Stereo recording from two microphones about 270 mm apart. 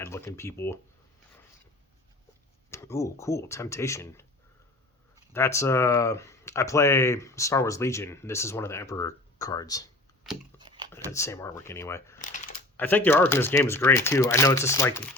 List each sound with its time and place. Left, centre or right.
0.0 s speech: centre
2.6 s speech: centre
5.3 s speech: centre
10.6 s a sound: centre
10.9 s speech: centre
12.2 s a sound: left
12.7 s speech: centre